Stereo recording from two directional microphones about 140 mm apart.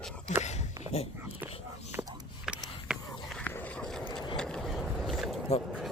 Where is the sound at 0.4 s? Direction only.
55° left (ahead or behind).